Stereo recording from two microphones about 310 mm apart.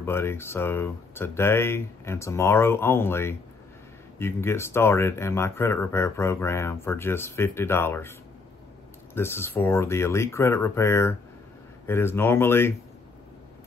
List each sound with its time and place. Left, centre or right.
0.0 s speech: centre
9.1 s speech: centre